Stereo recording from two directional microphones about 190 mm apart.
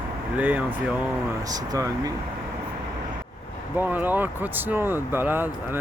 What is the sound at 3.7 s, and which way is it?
Speech, 10° right (ahead or behind).